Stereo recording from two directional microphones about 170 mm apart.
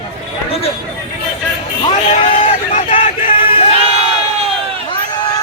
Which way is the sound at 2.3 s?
40° left (ahead or behind).